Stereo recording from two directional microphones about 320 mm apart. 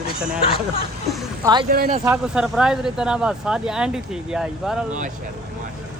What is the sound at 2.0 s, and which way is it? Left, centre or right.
Speech, centre.